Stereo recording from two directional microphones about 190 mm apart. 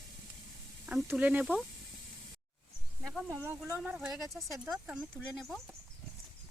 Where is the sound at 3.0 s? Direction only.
10° right (ahead or behind).